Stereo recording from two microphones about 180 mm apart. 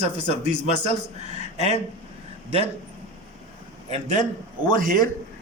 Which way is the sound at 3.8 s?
40° right (ahead or behind).